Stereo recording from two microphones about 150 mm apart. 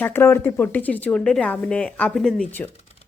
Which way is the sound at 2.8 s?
45° left (ahead or behind).